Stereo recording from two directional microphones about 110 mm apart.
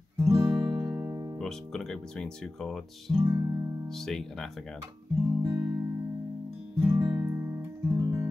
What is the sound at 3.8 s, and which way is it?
Speech, 5° left (ahead or behind).